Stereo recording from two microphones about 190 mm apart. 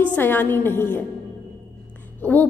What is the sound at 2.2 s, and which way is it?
Speech, 10° left (ahead or behind).